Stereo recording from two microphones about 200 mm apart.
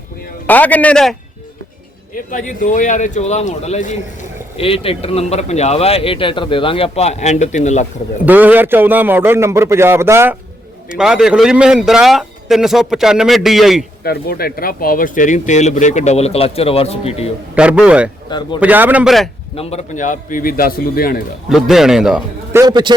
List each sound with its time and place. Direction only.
0.4 s a man's voice: 10° left (ahead or behind)
2.3 s speech: 40° left (ahead or behind)
8.2 s a man's voice: 10° right (ahead or behind)
14.0 s speech: 50° left (ahead or behind); by 17.2 s 30° left (ahead or behind)
17.5 s a man's voice: 5° right (ahead or behind)
18.3 s speech: 20° left (ahead or behind)
18.6 s a man's voice: 10° right (ahead or behind)
19.5 s a man's voice: 35° left (ahead or behind)
21.5 s a man's voice: centre (ahead or behind)
22.6 s a man's voice: 20° right (ahead or behind)